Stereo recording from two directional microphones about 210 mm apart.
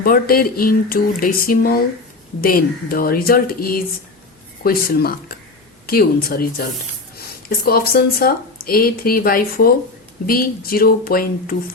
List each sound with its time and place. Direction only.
0.0 s speech: 45° left (ahead or behind)